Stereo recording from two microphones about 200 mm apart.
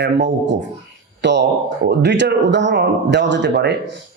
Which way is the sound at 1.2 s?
60° right (ahead or behind).